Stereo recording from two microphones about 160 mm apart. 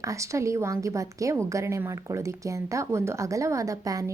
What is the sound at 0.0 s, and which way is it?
A woman's voice, 20° right (ahead or behind).